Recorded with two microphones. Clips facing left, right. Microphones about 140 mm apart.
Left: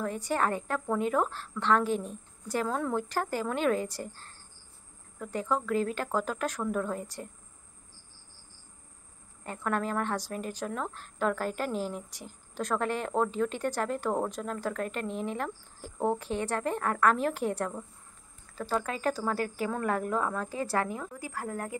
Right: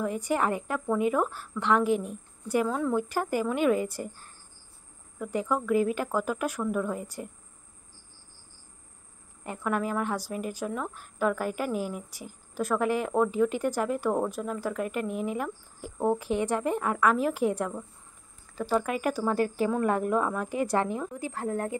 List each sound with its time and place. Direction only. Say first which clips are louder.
0.0 s a woman's voice: right 2 dB; 10° right (ahead or behind)
9.6 s a woman's voice: right 2 dB; 10° right (ahead or behind); by 21.7 s 25° right (ahead or behind)